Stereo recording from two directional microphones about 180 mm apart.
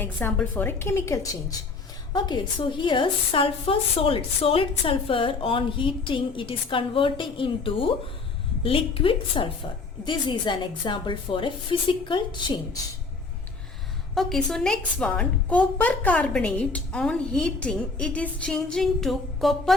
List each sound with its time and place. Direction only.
0.0 s a woman's voice: 10° left (ahead or behind)
14.2 s a woman's voice: centre (ahead or behind)